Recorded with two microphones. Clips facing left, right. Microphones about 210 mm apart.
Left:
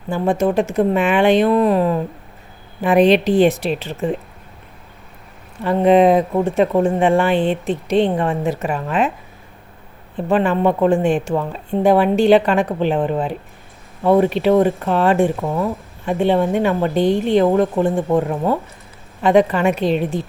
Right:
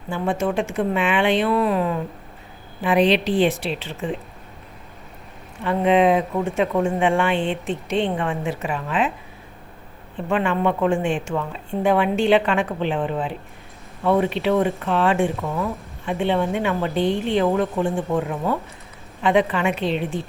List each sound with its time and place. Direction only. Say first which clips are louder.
0.1 s speech: left 5 dB; 40° left (ahead or behind)
5.6 s speech: left 5 dB; 40° left (ahead or behind)
10.2 s speech: left 5 dB; 35° left (ahead or behind)